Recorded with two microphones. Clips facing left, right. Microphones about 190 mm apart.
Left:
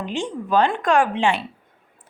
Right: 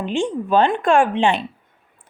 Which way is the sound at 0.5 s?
20° right (ahead or behind).